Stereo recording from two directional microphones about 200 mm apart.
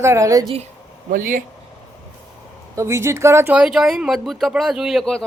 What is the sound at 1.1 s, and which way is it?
Speech, 45° right (ahead or behind).